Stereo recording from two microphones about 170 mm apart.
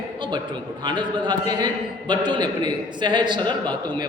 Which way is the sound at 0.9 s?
25° right (ahead or behind).